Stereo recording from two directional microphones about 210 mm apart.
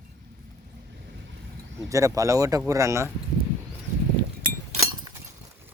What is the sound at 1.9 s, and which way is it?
Speech, 15° right (ahead or behind).